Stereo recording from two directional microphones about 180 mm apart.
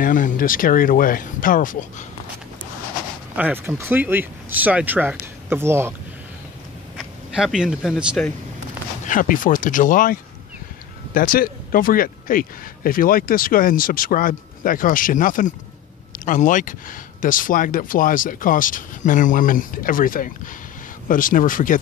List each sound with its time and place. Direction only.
0.0 s speech: 50° left (ahead or behind)
3.3 s speech: 10° right (ahead or behind)
7.0 s speech: 5° right (ahead or behind)
9.0 s speech: 50° left (ahead or behind)
11.1 s speech: 50° left (ahead or behind)